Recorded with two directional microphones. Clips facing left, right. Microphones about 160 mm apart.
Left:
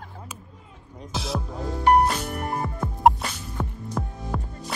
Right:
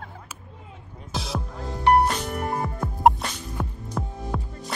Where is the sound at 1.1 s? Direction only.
Centre (ahead or behind).